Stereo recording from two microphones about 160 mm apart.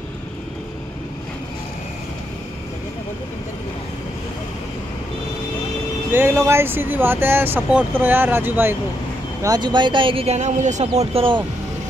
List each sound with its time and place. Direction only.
6.1 s speech: 15° right (ahead or behind)
9.4 s speech: 25° right (ahead or behind)